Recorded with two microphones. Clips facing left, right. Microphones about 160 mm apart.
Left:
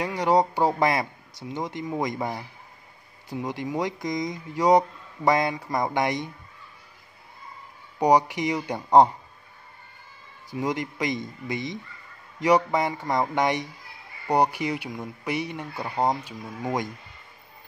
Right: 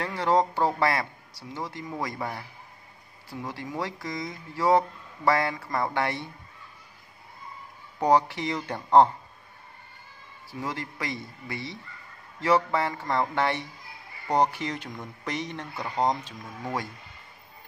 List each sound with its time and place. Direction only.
0.0 s speech: 15° left (ahead or behind)
8.0 s speech: 15° left (ahead or behind)
10.5 s speech: 15° left (ahead or behind)